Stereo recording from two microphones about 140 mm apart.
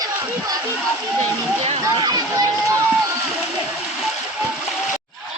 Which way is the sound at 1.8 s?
30° right (ahead or behind).